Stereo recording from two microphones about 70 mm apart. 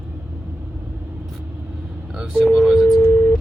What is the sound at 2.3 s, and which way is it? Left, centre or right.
Telephone dialing, centre.